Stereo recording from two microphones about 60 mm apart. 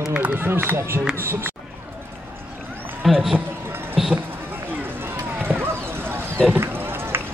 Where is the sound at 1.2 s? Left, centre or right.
Right.